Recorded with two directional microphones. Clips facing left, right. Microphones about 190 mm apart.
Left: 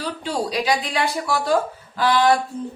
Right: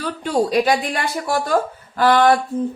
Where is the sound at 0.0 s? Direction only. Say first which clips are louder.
Right 5 dB; 50° right (ahead or behind).